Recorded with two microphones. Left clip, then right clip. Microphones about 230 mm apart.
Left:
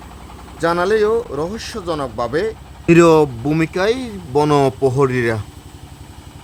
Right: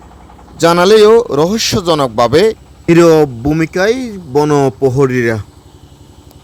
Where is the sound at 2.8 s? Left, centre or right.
Centre.